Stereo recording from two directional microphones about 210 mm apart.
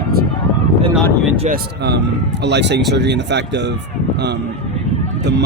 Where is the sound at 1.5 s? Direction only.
50° right (ahead or behind).